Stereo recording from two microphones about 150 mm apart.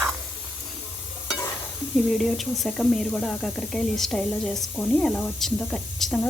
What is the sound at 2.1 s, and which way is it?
Speech, centre (ahead or behind).